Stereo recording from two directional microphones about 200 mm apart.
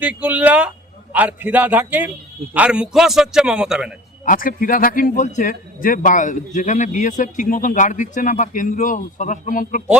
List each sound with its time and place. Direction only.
0.0 s a man's voice: 5° right (ahead or behind)
4.3 s speech: 45° left (ahead or behind)